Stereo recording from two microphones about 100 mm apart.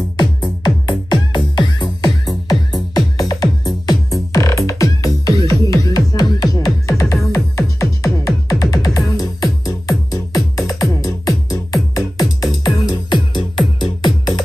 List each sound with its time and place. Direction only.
0.2 s music: 45° left (ahead or behind)